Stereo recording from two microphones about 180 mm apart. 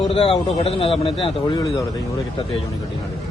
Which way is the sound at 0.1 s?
35° left (ahead or behind).